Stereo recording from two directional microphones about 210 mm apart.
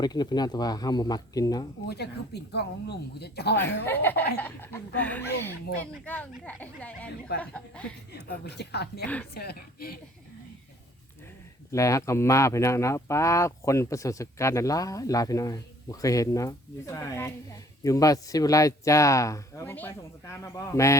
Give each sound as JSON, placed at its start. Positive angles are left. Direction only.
{"t": 0.0, "sound": "speech", "side_deg": 20}
{"t": 1.9, "sound": "speech", "side_deg": 50}
{"t": 3.8, "sound": "speech", "side_deg": 10}
{"t": 8.1, "sound": "speech", "side_deg": 50}
{"t": 11.7, "sound": "speech", "side_deg": 15}